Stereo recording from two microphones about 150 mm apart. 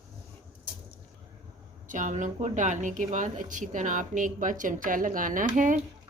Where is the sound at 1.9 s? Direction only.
55° right (ahead or behind).